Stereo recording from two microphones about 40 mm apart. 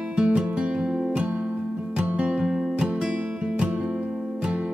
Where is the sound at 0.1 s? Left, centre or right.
Right.